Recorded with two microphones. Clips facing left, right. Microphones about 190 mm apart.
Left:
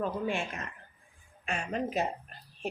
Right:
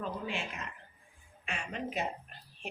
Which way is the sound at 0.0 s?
50° left (ahead or behind).